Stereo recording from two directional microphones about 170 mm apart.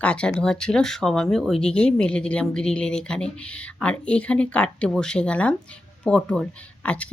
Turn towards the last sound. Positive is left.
turn(degrees=10)  # may be behind; listen again after turning